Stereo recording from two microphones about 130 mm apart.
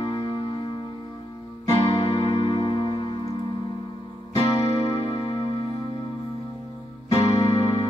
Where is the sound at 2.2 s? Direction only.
40° left (ahead or behind).